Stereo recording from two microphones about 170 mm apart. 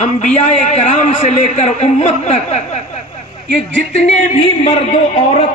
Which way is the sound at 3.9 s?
40° left (ahead or behind).